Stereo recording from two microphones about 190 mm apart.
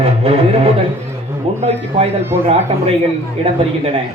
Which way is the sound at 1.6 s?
35° right (ahead or behind).